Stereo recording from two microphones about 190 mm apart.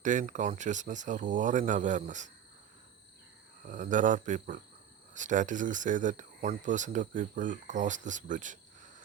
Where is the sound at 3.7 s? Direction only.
40° right (ahead or behind).